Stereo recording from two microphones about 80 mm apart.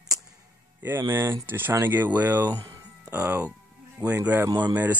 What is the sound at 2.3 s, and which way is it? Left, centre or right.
Speech, right.